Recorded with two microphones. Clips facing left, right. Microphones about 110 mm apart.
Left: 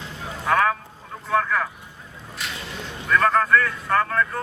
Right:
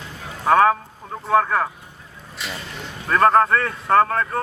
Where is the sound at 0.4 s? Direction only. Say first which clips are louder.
Right 5 dB; 35° right (ahead or behind).